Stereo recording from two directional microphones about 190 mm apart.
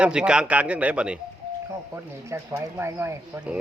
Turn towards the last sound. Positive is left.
turn(degrees=-10)  # may be behind; listen again after turning